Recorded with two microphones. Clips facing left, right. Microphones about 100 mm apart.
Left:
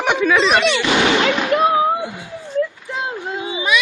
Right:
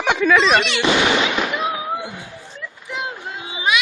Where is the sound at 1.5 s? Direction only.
55° left (ahead or behind).